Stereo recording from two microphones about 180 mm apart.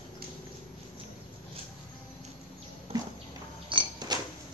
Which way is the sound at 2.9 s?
35° right (ahead or behind).